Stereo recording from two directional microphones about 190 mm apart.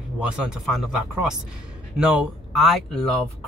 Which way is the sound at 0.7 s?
5° right (ahead or behind).